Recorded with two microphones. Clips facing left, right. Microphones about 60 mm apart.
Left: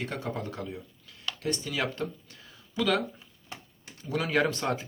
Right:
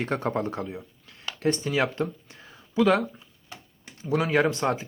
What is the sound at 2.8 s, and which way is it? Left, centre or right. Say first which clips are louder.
Speech: right 6 dB; right.